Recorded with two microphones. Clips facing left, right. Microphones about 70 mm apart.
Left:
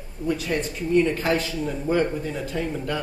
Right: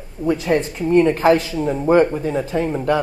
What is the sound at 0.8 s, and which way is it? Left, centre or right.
A woman's voice, right.